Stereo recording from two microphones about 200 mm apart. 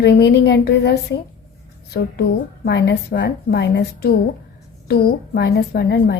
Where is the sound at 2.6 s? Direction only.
60° left (ahead or behind).